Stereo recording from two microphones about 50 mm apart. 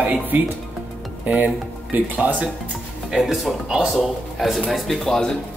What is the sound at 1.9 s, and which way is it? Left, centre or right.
Speech, right.